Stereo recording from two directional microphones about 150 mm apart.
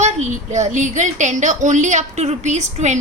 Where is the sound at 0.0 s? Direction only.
50° right (ahead or behind).